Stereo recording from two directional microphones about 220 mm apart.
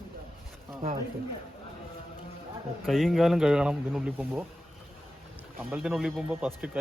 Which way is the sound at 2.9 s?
Centre (ahead or behind).